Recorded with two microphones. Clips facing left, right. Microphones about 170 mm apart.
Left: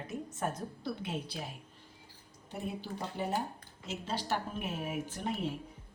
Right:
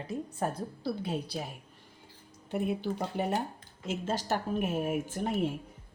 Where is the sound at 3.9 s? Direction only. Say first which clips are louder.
Right 4 dB; 45° right (ahead or behind).